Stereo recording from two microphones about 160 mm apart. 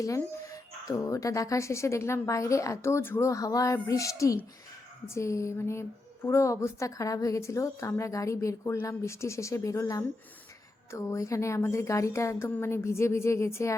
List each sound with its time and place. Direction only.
0.0 s a woman's voice: 20° left (ahead or behind)